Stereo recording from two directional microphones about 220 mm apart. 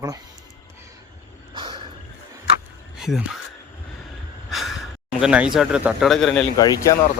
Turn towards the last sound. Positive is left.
turn(degrees=15)  # may be behind; listen again after turning